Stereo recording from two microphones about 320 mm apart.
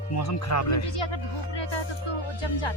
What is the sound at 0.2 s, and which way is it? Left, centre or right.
Speech, left.